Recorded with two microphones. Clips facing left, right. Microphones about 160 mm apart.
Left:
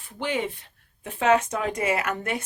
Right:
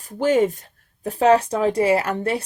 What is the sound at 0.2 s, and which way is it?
Speech, 40° right (ahead or behind).